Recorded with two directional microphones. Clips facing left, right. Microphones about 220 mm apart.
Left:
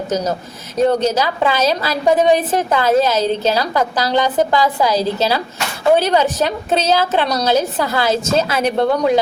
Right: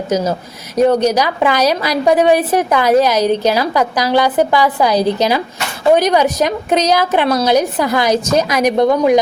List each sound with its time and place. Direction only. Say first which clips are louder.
0.1 s a woman's voice: right 4 dB; 10° right (ahead or behind)